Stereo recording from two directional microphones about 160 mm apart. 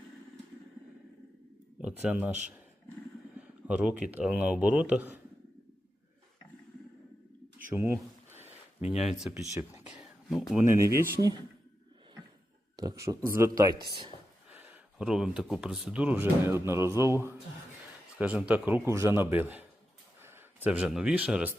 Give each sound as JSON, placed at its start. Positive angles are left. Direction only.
{"t": 1.8, "sound": "speech", "side_deg": -10}
{"t": 3.3, "sound": "speech", "side_deg": -5}
{"t": 7.7, "sound": "speech", "side_deg": -15}
{"t": 8.9, "sound": "speech", "side_deg": 0}
{"t": 9.6, "sound": "a sound", "side_deg": -10}
{"t": 10.6, "sound": "speech", "side_deg": -20}
{"t": 12.7, "sound": "speech", "side_deg": -20}
{"t": 14.5, "sound": "speech", "side_deg": -10}